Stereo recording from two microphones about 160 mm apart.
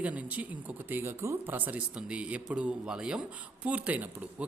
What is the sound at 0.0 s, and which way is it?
A man's voice, 10° right (ahead or behind).